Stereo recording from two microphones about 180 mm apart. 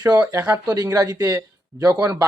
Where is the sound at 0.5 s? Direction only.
20° right (ahead or behind).